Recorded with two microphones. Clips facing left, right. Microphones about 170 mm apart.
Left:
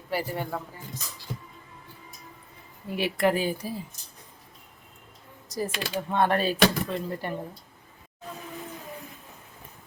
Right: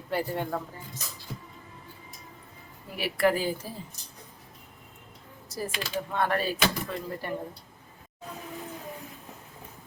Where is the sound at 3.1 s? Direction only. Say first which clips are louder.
Right 1 dB; 20° left (ahead or behind).